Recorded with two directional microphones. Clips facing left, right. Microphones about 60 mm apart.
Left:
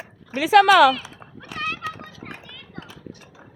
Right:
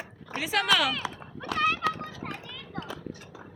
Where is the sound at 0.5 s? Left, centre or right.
Left.